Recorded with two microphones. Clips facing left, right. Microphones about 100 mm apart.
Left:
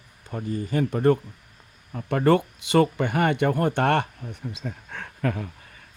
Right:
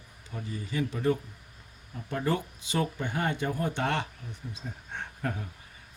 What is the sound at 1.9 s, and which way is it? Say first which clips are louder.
Speech: left 10 dB; 70° left (ahead or behind).